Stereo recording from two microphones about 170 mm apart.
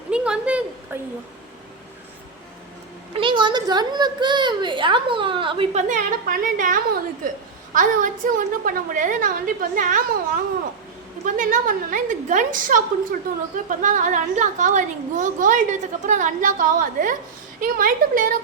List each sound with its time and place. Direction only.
0.1 s a sound: 5° right (ahead or behind)
3.1 s a child's voice: 30° right (ahead or behind)
5.7 s a woman's voice: 55° right (ahead or behind)